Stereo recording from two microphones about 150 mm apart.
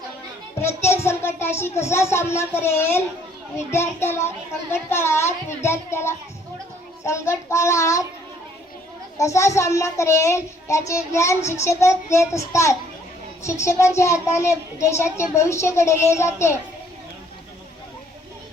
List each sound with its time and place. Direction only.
0.6 s a child's voice: 15° left (ahead or behind)
9.1 s a woman's voice: 20° left (ahead or behind)